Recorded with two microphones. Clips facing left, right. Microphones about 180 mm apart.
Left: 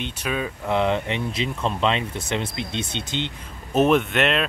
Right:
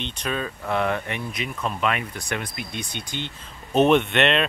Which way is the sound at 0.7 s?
20° left (ahead or behind).